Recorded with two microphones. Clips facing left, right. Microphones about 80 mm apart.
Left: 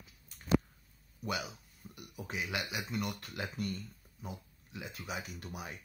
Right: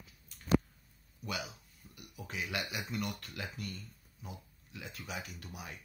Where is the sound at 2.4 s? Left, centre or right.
Centre.